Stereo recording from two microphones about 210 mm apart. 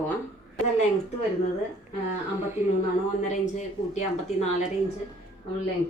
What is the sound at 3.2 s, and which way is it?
Speech, 35° left (ahead or behind).